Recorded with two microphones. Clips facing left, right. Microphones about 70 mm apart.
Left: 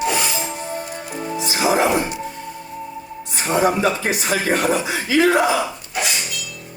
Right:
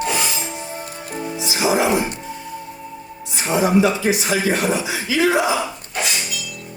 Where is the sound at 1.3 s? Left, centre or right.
Left.